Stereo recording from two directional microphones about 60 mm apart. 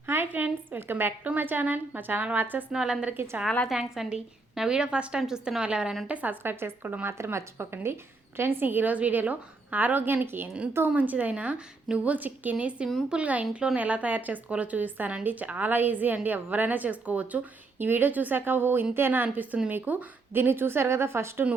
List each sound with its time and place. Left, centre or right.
0.1 s a sound: right
0.8 s a woman's voice: right
2.7 s a woman's voice: centre
6.4 s a woman's voice: right
10.8 s a woman's voice: right